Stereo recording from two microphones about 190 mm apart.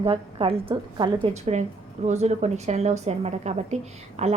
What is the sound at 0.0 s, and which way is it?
A woman's voice, 30° right (ahead or behind).